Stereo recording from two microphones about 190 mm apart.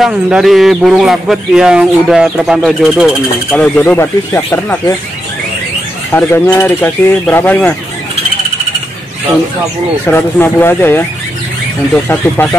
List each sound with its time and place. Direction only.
0.0 s speech: centre (ahead or behind)
3.5 s speech: 10° left (ahead or behind)
6.1 s speech: 10° left (ahead or behind)
10.0 s speech: 10° left (ahead or behind)